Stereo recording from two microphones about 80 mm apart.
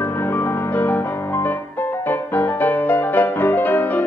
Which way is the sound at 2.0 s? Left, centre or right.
Left.